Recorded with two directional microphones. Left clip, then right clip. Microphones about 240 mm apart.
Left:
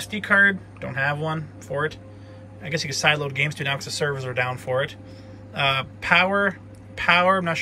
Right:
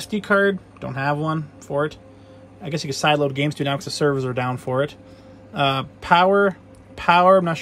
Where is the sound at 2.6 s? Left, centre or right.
Centre.